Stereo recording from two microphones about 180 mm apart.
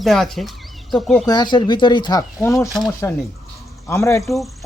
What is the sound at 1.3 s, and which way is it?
Speech, 25° left (ahead or behind).